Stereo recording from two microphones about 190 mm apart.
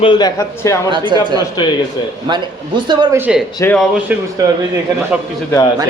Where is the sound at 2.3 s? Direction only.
25° right (ahead or behind).